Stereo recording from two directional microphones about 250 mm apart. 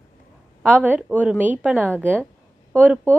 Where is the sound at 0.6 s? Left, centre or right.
Centre.